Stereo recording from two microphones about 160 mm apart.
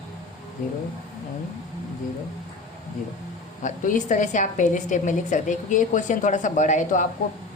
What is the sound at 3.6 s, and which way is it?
A woman's voice, 50° left (ahead or behind).